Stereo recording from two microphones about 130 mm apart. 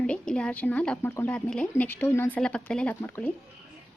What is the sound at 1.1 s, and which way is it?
Speech, 20° left (ahead or behind).